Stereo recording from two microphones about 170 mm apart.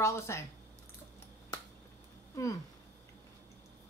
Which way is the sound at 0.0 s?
15° left (ahead or behind).